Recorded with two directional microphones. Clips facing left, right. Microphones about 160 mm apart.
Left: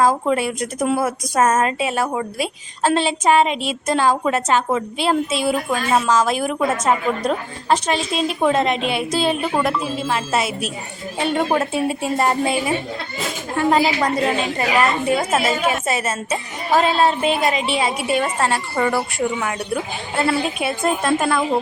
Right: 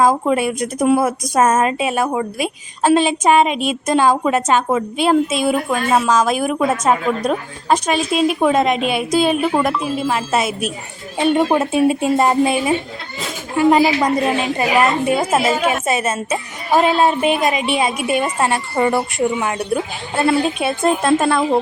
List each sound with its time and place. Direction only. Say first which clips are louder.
0.0 s a woman's voice: right 2 dB; 15° right (ahead or behind)